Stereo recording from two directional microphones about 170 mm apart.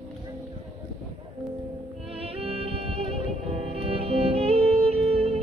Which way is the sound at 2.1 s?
35° right (ahead or behind).